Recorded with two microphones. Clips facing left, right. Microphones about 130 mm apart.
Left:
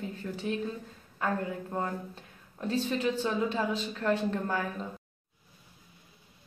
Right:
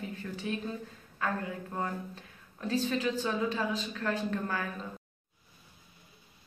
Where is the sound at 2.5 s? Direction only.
20° left (ahead or behind).